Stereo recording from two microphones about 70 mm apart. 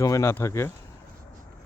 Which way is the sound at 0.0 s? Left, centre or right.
Left.